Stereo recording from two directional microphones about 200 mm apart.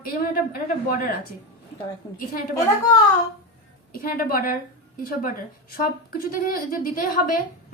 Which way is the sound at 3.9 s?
45° left (ahead or behind).